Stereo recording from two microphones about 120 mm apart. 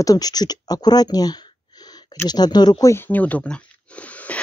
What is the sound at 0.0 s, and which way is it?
Speech, 30° left (ahead or behind).